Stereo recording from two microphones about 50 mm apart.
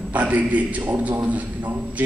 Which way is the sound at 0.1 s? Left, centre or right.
Right.